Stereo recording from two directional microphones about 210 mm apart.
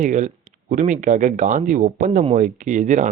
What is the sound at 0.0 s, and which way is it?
Speech, 35° right (ahead or behind).